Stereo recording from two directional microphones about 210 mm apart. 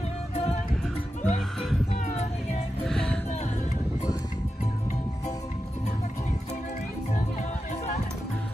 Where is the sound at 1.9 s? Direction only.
35° left (ahead or behind).